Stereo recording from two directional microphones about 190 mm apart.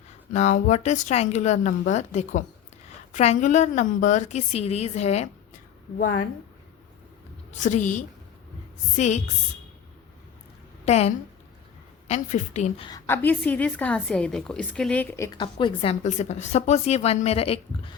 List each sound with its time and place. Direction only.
0.3 s a woman's voice: 40° left (ahead or behind)
7.5 s a woman's voice: 40° left (ahead or behind)
10.8 s a woman's voice: 35° left (ahead or behind)
12.9 s a woman's voice: 10° left (ahead or behind); by 17.9 s 30° left (ahead or behind)